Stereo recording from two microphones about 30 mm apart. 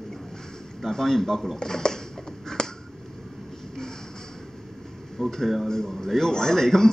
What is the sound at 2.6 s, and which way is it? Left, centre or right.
Finger snapping, left.